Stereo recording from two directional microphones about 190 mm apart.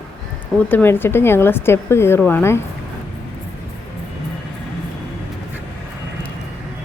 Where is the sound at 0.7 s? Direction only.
10° left (ahead or behind).